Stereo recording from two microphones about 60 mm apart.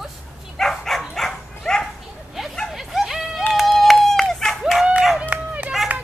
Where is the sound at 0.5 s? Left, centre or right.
Centre.